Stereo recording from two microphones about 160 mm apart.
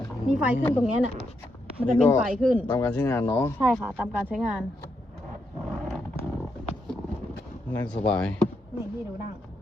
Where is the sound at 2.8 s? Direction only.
10° left (ahead or behind).